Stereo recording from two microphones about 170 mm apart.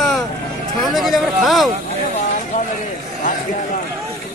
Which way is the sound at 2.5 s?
45° left (ahead or behind).